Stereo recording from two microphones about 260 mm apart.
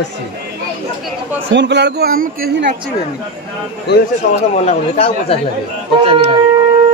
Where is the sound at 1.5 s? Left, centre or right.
Right.